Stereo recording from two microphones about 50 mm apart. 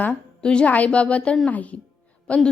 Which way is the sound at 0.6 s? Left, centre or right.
Left.